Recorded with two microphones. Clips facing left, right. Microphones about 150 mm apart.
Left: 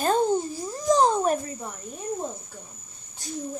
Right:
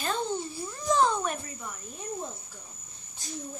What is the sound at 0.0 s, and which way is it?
Cricket, 45° left (ahead or behind).